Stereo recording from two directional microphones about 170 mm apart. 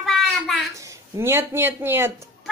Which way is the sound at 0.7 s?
20° right (ahead or behind).